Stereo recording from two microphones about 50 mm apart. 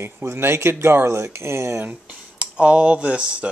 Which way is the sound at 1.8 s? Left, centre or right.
Right.